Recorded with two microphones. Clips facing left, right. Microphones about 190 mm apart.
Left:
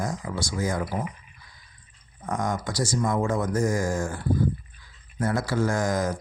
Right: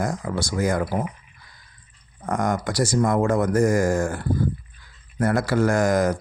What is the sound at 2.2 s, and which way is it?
Speech, 60° right (ahead or behind).